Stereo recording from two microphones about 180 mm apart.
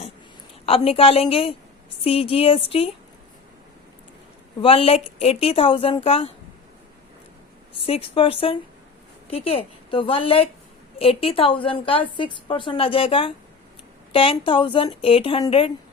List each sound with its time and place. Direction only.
0.6 s speech: 30° left (ahead or behind)
4.6 s speech: 30° left (ahead or behind)
7.7 s a woman's voice: 35° left (ahead or behind)